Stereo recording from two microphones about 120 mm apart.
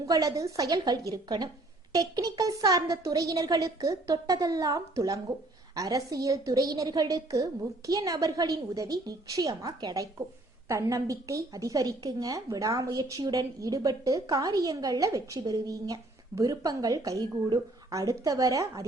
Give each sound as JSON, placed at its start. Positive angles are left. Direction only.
{"t": 0.0, "sound": "a woman's voice", "side_deg": -30}